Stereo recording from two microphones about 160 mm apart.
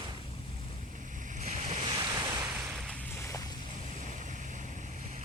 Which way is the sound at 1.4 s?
45° right (ahead or behind).